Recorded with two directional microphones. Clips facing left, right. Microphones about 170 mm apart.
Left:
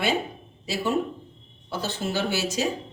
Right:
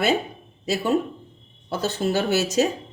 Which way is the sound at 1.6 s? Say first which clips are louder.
Right 5 dB; 45° right (ahead or behind).